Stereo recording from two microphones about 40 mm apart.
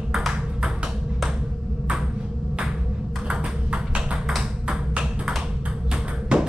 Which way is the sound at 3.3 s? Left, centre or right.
Right.